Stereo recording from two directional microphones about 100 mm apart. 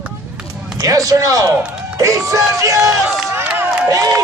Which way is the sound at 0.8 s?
35° right (ahead or behind).